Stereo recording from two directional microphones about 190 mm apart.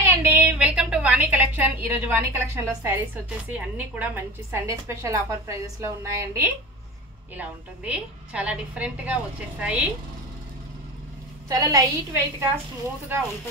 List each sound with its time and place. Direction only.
0.0 s a sound: 10° right (ahead or behind)
3.5 s a woman's voice: 10° right (ahead or behind)
11.4 s a woman's voice: 20° right (ahead or behind)